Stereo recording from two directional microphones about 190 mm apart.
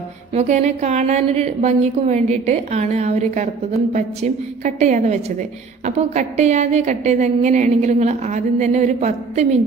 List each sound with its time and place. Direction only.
0.3 s a woman's voice: 35° right (ahead or behind)